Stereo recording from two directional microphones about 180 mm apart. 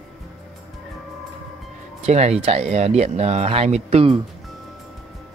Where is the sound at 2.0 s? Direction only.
35° right (ahead or behind).